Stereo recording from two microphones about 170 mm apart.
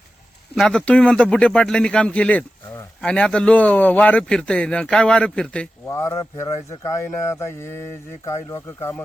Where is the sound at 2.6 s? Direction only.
20° left (ahead or behind).